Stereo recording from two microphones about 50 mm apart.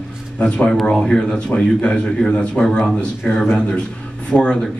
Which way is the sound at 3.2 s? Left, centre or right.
Centre.